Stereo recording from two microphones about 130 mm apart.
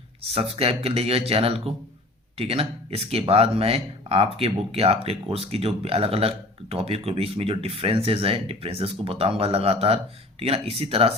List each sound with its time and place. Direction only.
0.2 s speech: 50° right (ahead or behind)